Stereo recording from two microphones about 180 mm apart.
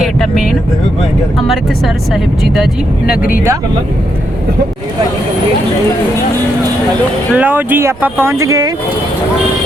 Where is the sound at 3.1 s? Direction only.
50° left (ahead or behind).